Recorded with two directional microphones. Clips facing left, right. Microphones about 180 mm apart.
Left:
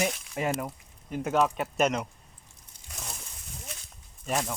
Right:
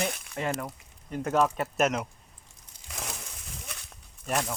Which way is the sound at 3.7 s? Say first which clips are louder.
Left 1 dB; 65° right (ahead or behind).